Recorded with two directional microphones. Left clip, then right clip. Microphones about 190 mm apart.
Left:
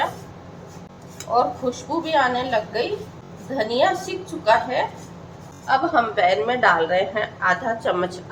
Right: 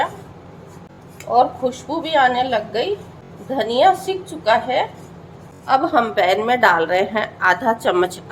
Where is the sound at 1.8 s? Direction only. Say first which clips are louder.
Right 4 dB; 55° right (ahead or behind).